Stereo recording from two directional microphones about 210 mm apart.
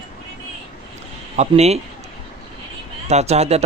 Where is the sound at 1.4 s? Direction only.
30° right (ahead or behind).